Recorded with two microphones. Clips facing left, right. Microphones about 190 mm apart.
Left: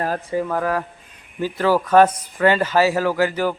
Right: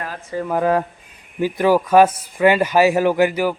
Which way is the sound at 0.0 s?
35° left (ahead or behind).